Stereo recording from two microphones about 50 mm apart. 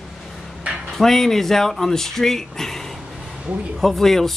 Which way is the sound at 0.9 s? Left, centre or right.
Centre.